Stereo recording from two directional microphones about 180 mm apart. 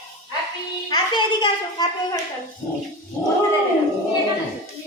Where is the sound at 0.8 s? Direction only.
25° left (ahead or behind).